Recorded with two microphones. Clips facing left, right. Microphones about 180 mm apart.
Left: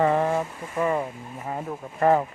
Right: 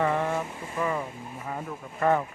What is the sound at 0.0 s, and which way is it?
Vehicle, 35° left (ahead or behind).